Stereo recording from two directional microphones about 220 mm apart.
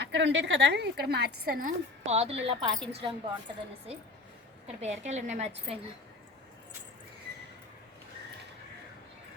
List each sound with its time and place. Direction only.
0.0 s a woman's voice: 55° right (ahead or behind); by 3.2 s 25° right (ahead or behind)
4.6 s a woman's voice: 30° right (ahead or behind)